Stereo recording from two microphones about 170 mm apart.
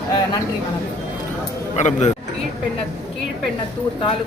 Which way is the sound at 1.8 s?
40° left (ahead or behind).